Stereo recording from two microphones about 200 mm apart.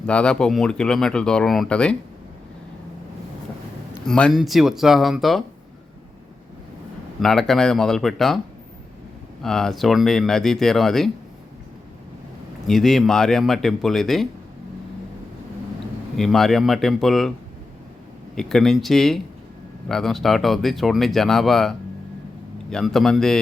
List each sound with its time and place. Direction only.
0.0 s speech: 5° left (ahead or behind)
4.0 s speech: 5° left (ahead or behind)
7.2 s speech: centre (ahead or behind)
9.4 s speech: centre (ahead or behind)
12.6 s speech: centre (ahead or behind)
16.1 s speech: centre (ahead or behind)
18.3 s speech: centre (ahead or behind)